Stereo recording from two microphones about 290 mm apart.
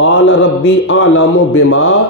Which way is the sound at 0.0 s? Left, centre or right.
Left.